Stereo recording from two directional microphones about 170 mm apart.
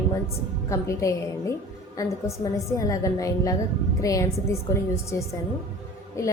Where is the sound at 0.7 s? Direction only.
20° left (ahead or behind).